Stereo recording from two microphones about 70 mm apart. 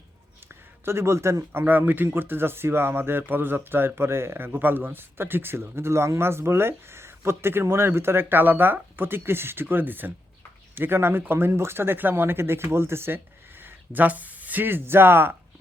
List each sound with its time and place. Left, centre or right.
0.4 s speech: right